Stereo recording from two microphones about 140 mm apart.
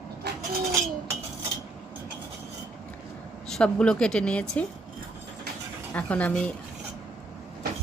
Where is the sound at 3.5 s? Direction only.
5° left (ahead or behind).